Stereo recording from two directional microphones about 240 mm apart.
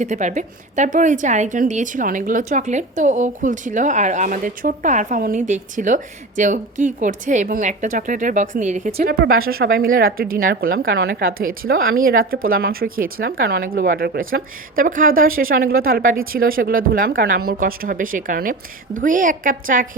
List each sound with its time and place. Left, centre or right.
0.0 s speech: right